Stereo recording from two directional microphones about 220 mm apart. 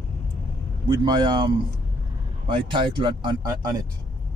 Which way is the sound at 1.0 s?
20° right (ahead or behind).